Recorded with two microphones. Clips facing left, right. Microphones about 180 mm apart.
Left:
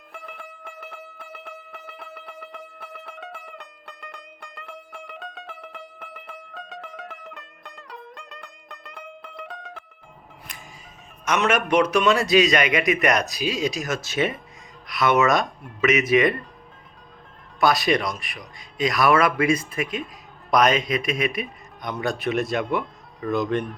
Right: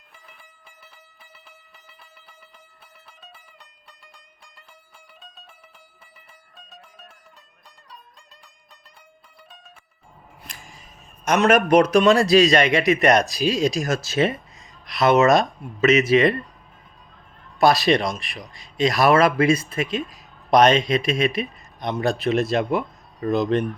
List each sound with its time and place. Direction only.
0.1 s music: 70° left (ahead or behind); by 9.8 s 90° left
11.3 s a man's voice: 40° right (ahead or behind)
17.6 s speech: 30° right (ahead or behind)